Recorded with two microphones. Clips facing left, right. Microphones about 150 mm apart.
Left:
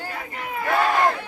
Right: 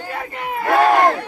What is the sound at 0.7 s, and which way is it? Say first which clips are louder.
Crowd: right 6 dB; 50° right (ahead or behind).